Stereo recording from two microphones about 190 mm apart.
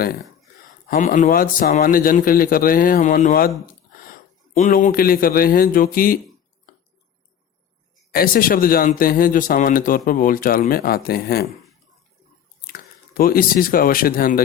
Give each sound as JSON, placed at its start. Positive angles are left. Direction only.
{"t": 0.9, "sound": "speech", "side_deg": 45}
{"t": 4.5, "sound": "speech", "side_deg": 40}
{"t": 8.1, "sound": "speech", "side_deg": 50}
{"t": 12.6, "sound": "speech", "side_deg": 50}